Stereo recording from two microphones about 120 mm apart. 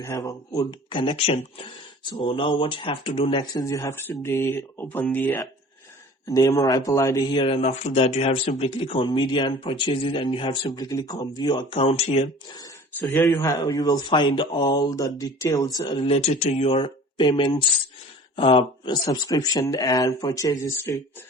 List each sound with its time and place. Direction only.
0.0 s speech: 25° left (ahead or behind); by 3.6 s 45° left (ahead or behind)
3.6 s speech: 25° left (ahead or behind)
6.2 s speech: 25° left (ahead or behind)
7.3 s speech: 50° left (ahead or behind)
12.5 s speech: 25° left (ahead or behind)
13.6 s speech: 35° left (ahead or behind)
15.9 s speech: 50° left (ahead or behind)
18.3 s speech: 50° left (ahead or behind)
18.9 s speech: 35° left (ahead or behind)